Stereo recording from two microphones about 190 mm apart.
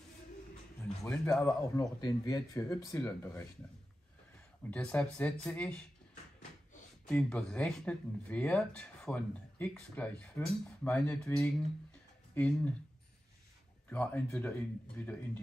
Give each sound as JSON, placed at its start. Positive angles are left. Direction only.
{"t": 1.0, "sound": "speech", "side_deg": 10}
{"t": 4.6, "sound": "speech", "side_deg": 5}
{"t": 7.1, "sound": "speech", "side_deg": 5}
{"t": 13.8, "sound": "speech", "side_deg": 10}